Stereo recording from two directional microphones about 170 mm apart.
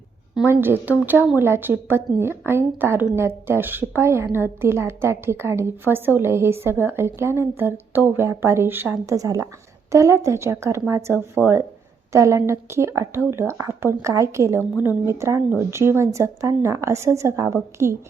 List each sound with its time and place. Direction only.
0.4 s a woman's voice: 15° right (ahead or behind)